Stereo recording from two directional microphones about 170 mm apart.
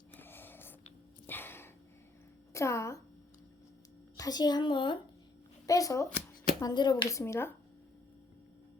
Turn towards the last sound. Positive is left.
turn(degrees=15)  # may be behind; listen again after turning